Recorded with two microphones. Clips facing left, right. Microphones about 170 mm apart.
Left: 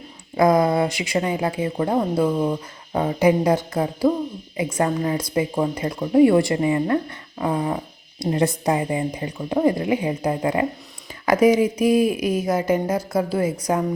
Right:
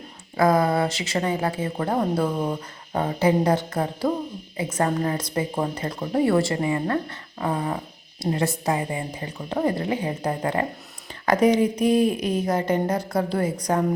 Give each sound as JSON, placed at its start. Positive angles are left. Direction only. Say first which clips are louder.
{"t": 0.3, "sound": "speech", "louder": "left 3 dB", "side_deg": 15}